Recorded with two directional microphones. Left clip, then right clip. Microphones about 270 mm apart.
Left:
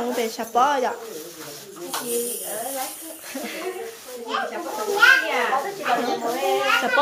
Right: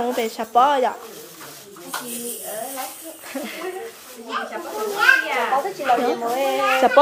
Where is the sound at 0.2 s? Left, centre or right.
Centre.